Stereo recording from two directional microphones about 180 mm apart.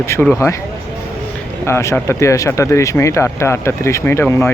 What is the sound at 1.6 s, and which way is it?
Speech, 15° left (ahead or behind).